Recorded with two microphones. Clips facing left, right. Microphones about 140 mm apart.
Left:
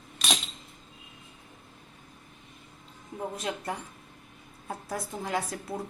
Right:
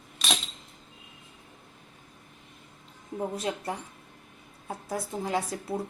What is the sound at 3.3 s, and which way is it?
Speech, 30° right (ahead or behind).